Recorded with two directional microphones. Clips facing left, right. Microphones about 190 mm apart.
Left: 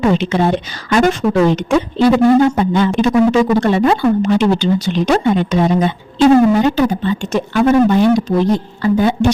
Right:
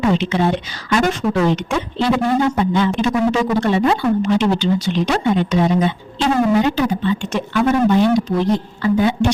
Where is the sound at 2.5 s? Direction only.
45° left (ahead or behind).